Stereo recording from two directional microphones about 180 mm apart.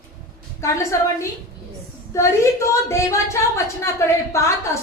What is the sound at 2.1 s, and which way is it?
A woman's voice, 15° left (ahead or behind).